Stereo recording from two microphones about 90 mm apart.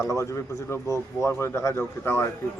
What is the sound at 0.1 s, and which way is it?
A man's voice, 35° left (ahead or behind).